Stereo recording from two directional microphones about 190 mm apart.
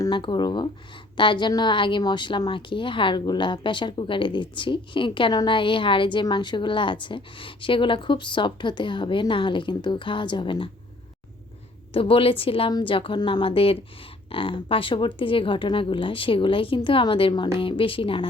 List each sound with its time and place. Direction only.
0.0 s a woman's voice: 25° left (ahead or behind)
11.9 s a woman's voice: 30° left (ahead or behind)